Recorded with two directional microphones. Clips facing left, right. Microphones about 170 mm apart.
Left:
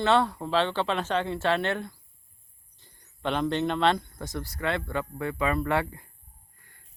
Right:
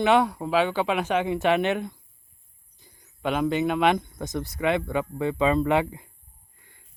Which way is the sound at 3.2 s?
10° right (ahead or behind).